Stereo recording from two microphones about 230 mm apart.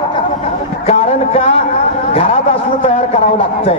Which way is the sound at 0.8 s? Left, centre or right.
Left.